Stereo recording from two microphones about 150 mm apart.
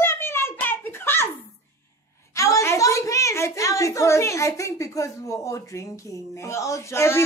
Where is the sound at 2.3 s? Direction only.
20° left (ahead or behind).